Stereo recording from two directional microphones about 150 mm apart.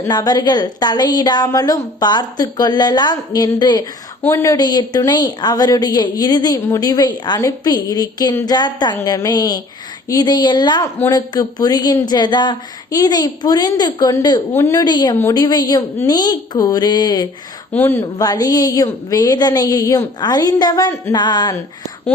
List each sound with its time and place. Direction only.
0.1 s a woman's voice: 25° left (ahead or behind)
17.7 s a woman's voice: 15° left (ahead or behind); by 21.5 s 30° left (ahead or behind)